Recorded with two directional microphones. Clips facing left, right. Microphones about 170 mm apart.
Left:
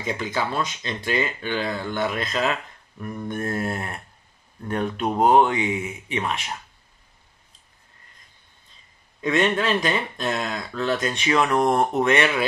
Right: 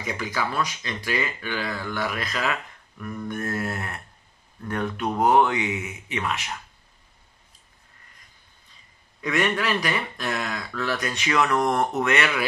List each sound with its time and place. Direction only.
0.0 s speech: 25° left (ahead or behind)
9.2 s speech: 25° left (ahead or behind)